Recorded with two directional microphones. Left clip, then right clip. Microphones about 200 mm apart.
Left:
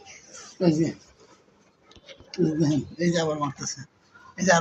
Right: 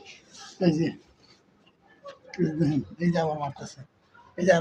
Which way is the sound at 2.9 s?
20° right (ahead or behind).